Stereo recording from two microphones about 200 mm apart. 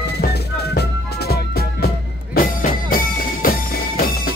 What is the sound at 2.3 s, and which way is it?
Music, 45° left (ahead or behind).